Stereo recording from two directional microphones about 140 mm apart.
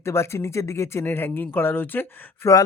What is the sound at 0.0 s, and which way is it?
Speech, 20° left (ahead or behind).